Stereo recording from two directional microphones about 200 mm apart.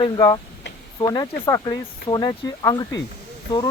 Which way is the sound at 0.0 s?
20° left (ahead or behind).